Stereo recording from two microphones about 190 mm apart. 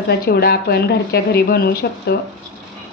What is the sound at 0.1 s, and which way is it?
Speech, 55° left (ahead or behind).